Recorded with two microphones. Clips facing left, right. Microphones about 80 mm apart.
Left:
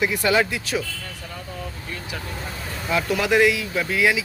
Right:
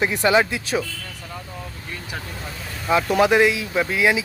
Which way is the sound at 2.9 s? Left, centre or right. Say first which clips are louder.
Right 4 dB; right.